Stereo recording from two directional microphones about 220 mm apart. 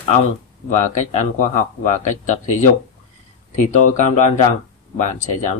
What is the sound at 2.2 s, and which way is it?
Speech, 35° left (ahead or behind).